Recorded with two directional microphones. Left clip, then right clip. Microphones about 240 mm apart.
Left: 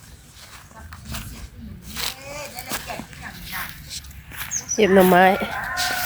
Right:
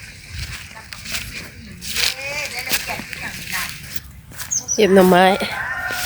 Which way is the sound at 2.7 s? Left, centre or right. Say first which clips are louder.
Right 8 dB; centre.